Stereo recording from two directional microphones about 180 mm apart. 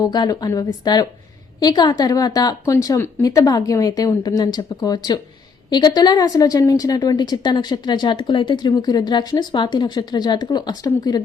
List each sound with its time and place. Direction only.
0.0 s a woman's voice: 20° left (ahead or behind)